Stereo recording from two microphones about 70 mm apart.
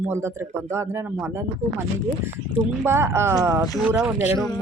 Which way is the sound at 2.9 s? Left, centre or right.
Right.